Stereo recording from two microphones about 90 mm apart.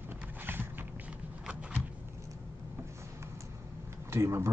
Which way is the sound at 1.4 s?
10° right (ahead or behind).